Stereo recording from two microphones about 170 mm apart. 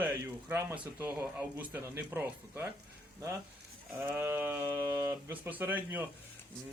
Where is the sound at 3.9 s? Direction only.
10° right (ahead or behind).